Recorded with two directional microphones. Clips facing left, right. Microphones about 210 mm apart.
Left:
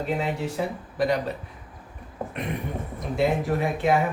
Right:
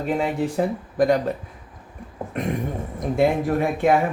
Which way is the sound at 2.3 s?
45° right (ahead or behind).